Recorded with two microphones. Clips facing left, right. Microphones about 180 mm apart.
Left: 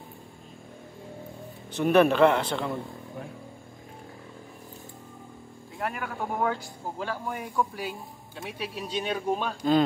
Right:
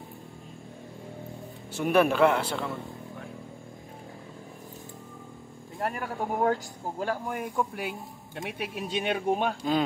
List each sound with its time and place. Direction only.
1.7 s a man's voice: 10° right (ahead or behind)
5.8 s speech: 40° right (ahead or behind); by 9.6 s 60° right (ahead or behind)